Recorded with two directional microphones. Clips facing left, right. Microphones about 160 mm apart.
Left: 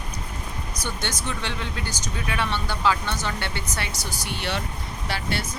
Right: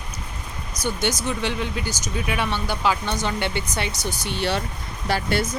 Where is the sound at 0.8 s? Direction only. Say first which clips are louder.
Right 7 dB; 10° right (ahead or behind).